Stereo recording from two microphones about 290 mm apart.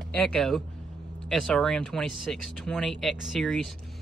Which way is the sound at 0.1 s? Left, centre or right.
Centre.